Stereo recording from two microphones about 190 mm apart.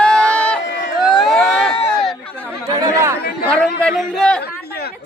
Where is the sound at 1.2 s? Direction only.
Centre (ahead or behind).